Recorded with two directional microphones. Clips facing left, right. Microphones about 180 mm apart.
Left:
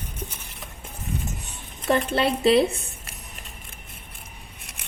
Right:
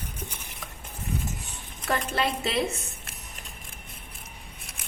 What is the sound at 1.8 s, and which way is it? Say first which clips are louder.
Speech: left 6 dB; 30° left (ahead or behind).